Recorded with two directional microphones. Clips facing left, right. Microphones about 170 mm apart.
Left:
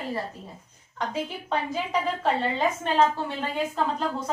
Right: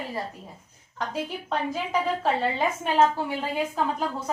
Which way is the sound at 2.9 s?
5° right (ahead or behind).